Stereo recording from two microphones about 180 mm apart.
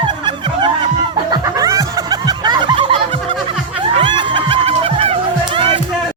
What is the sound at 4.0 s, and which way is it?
Music, 25° right (ahead or behind).